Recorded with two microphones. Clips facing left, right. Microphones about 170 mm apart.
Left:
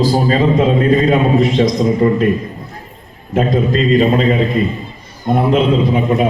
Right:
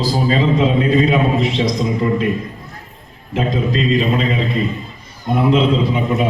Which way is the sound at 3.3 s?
45° left (ahead or behind).